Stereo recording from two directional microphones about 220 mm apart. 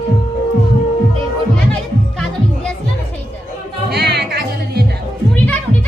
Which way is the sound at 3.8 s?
50° right (ahead or behind).